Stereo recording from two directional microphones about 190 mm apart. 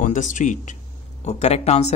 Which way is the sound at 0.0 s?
40° left (ahead or behind).